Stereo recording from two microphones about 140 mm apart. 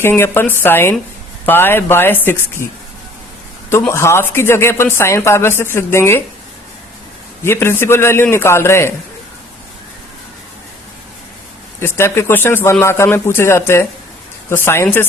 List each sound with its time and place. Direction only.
0.0 s speech: 15° left (ahead or behind)
3.7 s speech: 20° left (ahead or behind)
7.4 s speech: 15° left (ahead or behind)
11.8 s speech: 15° left (ahead or behind)